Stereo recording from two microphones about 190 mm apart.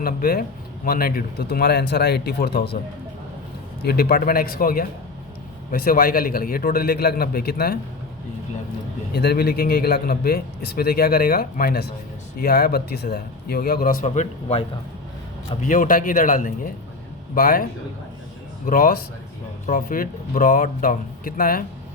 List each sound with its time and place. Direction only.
0.0 s a man's voice: 50° left (ahead or behind)
3.8 s a man's voice: 55° left (ahead or behind)
9.1 s a man's voice: 55° left (ahead or behind)
14.0 s speech: 35° left (ahead or behind)
15.6 s a man's voice: 45° left (ahead or behind)